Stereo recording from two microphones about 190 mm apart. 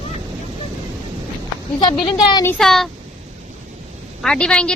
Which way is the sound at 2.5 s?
Centre (ahead or behind).